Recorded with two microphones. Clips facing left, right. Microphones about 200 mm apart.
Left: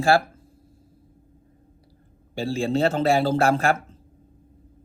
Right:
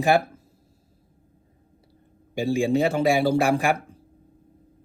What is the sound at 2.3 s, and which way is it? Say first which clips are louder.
A man's voice: right 2 dB; 15° right (ahead or behind).